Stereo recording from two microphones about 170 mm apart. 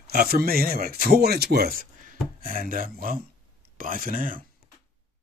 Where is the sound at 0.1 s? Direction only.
65° right (ahead or behind).